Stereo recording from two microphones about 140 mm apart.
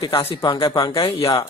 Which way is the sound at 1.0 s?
35° left (ahead or behind).